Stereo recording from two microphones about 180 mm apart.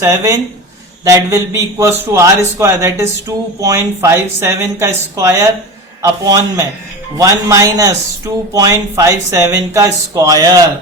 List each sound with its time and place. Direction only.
0.0 s a man's voice: 15° right (ahead or behind)